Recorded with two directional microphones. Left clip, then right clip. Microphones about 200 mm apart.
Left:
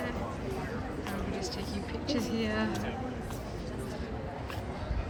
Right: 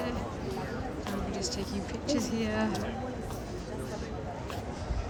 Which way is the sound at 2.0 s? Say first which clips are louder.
Right 1 dB; 5° right (ahead or behind).